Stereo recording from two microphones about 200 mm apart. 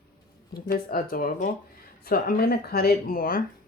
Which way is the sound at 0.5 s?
50° left (ahead or behind).